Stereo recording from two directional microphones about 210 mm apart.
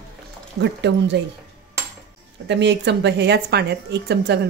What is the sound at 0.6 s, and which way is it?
Speech, 55° right (ahead or behind).